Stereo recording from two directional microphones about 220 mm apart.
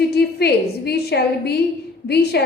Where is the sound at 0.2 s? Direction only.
45° left (ahead or behind).